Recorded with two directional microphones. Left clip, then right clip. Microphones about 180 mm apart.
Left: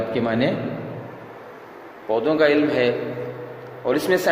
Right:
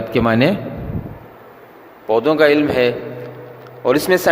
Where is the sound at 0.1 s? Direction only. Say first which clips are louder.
Right 9 dB; 30° right (ahead or behind).